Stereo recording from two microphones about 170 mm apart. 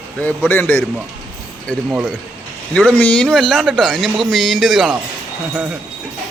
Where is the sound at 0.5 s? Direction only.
10° left (ahead or behind).